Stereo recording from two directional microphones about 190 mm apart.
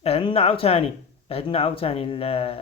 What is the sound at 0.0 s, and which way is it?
Speech, 30° left (ahead or behind).